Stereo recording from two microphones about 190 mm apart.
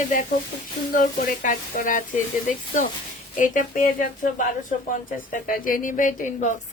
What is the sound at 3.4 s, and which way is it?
Speech, 45° left (ahead or behind).